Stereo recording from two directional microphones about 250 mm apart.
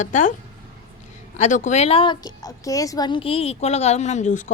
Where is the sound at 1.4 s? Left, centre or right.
Left.